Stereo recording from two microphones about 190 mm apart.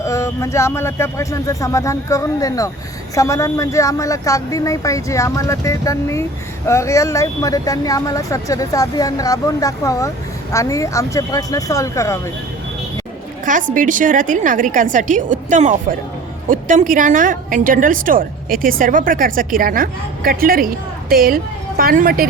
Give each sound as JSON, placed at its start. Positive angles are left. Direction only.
{"t": 0.0, "sound": "speech", "side_deg": 15}
{"t": 13.4, "sound": "a woman's voice", "side_deg": -45}